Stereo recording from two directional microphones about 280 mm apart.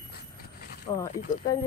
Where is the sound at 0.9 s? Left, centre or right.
Centre.